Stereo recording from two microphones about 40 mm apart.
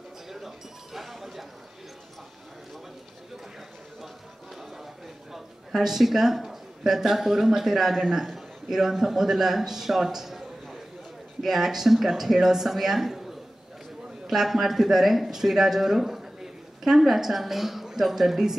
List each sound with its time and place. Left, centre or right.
0.3 s chink: centre
5.3 s a man's voice: centre
14.2 s a woman's voice: centre